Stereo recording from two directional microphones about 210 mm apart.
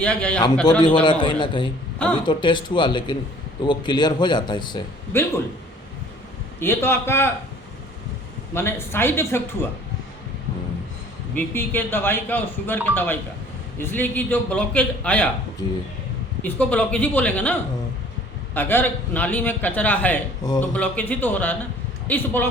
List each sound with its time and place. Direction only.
0.0 s a man's voice: 5° left (ahead or behind)
1.0 s speech: 20° left (ahead or behind)
6.6 s a man's voice: 10° left (ahead or behind)
8.5 s a man's voice: 10° left (ahead or behind)
11.3 s a man's voice: 10° left (ahead or behind)
15.6 s speech: 20° left (ahead or behind)
16.4 s a man's voice: 5° left (ahead or behind)